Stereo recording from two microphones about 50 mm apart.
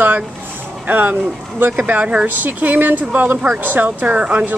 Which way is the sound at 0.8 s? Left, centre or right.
Right.